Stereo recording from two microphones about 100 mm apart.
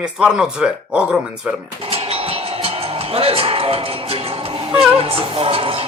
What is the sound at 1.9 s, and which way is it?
Music, 80° right.